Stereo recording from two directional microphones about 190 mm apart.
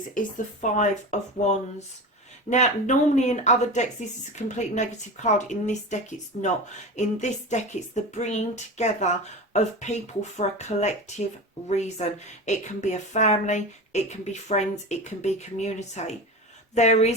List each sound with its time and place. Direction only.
0.1 s a woman's voice: 45° left (ahead or behind)